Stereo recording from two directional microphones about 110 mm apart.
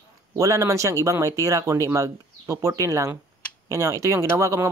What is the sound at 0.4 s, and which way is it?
Speech, 30° right (ahead or behind).